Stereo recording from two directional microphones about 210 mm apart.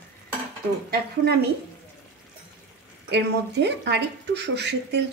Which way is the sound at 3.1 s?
55° right (ahead or behind).